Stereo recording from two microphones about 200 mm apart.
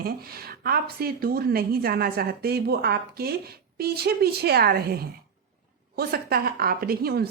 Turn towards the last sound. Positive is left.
turn(degrees=-50)  # may be behind; listen again after turning